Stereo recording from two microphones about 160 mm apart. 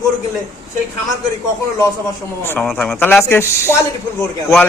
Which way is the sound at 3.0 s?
15° left (ahead or behind).